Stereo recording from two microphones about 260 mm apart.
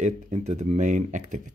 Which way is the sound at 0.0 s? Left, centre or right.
Right.